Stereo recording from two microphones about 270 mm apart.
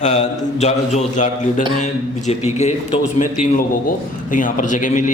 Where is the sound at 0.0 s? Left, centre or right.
Left.